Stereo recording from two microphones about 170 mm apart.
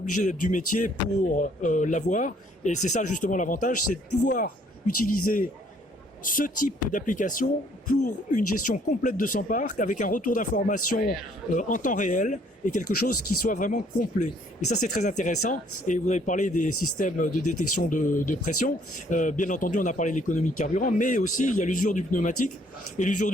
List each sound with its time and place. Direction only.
0.1 s speech: 50° left (ahead or behind)